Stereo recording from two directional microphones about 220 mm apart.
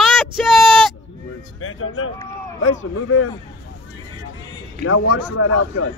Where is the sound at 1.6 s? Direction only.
70° left (ahead or behind).